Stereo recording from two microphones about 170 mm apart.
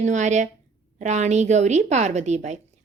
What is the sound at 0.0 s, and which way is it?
A woman's voice, 45° right (ahead or behind).